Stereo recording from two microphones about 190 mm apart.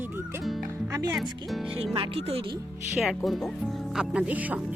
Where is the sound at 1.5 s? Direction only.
Centre (ahead or behind).